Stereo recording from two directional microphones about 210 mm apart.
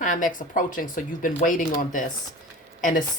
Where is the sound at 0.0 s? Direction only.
40° left (ahead or behind).